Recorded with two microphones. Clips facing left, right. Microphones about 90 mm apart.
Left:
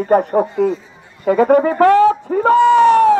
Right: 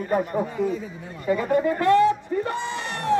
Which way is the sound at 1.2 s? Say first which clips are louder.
Left 9 dB; 90° left.